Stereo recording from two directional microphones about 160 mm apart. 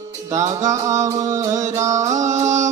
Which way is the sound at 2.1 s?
50° right (ahead or behind).